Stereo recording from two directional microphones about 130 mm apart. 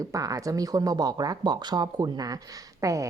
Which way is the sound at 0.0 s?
25° right (ahead or behind).